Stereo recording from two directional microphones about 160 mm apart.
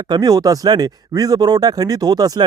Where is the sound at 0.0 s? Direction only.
25° right (ahead or behind).